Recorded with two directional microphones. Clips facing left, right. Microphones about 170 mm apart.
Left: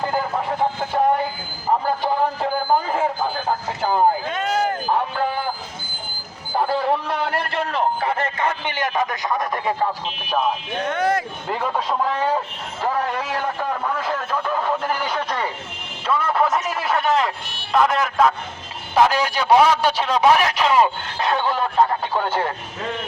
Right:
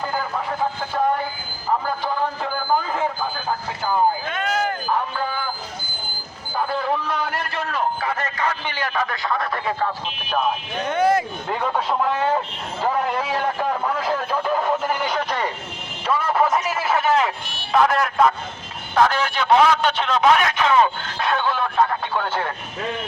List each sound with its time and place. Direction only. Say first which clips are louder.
0.1 s speech: left 3 dB; 25° left (ahead or behind)
2.4 s a sound: left 2 dB; 30° left (ahead or behind)
6.6 s a man's voice: left 3 dB; 30° left (ahead or behind)
10.8 s a man's voice: right 3 dB; 5° right (ahead or behind)
14.3 s a sound: right 1 dB; 5° right (ahead or behind)
16.0 s a man's voice: even; 5° right (ahead or behind)
18.9 s speech: left 1 dB; 10° left (ahead or behind)
21.2 s music: left 1 dB; 25° left (ahead or behind)